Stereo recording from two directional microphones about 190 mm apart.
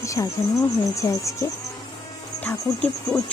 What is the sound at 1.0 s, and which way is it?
Insect, 20° left (ahead or behind).